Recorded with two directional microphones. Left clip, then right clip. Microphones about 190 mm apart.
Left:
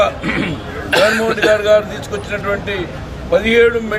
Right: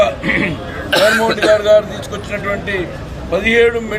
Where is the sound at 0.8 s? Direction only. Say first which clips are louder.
Right 1 dB; 60° right (ahead or behind).